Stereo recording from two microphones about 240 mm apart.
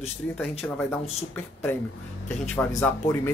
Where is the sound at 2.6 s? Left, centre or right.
Centre.